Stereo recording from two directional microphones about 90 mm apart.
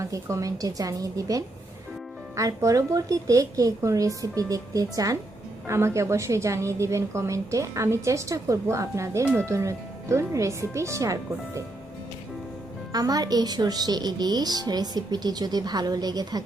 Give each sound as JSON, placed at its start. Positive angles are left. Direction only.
{"t": 0.0, "sound": "a woman's voice", "side_deg": -35}
{"t": 5.6, "sound": "a woman's voice", "side_deg": -30}
{"t": 12.9, "sound": "a woman's voice", "side_deg": -45}